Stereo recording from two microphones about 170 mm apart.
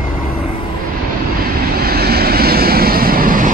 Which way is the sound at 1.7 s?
65° right (ahead or behind).